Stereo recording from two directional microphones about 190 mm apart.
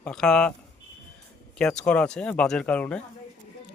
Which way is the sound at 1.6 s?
5° left (ahead or behind).